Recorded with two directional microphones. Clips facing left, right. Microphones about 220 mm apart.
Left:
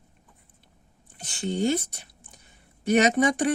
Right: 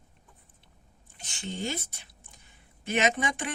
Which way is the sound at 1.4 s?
45° left (ahead or behind).